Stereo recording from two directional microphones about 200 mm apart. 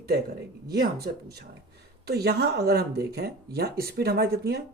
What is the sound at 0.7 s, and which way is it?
Speech, 50° right (ahead or behind).